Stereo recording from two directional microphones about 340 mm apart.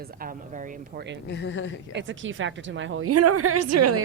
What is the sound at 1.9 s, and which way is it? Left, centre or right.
A woman's voice, right.